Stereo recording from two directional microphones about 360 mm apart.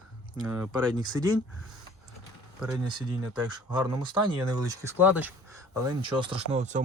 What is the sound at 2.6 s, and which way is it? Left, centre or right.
Speech, centre.